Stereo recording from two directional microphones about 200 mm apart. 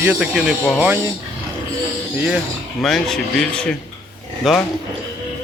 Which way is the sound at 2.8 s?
Centre (ahead or behind).